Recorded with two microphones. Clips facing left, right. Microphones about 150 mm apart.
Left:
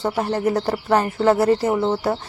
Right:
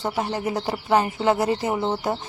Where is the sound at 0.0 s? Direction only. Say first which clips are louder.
Left 5 dB; 10° right (ahead or behind).